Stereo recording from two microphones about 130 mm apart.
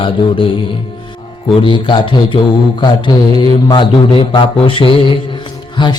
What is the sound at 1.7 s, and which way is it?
Mantra, 40° left (ahead or behind).